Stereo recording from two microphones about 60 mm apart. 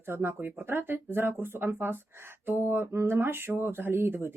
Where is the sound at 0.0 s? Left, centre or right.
Right.